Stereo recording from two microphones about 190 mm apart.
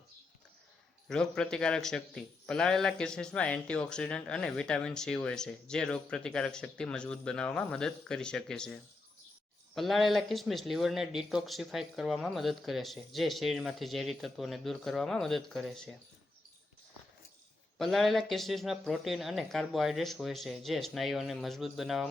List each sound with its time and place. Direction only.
1.0 s speech: 5° left (ahead or behind)
17.7 s speech: centre (ahead or behind)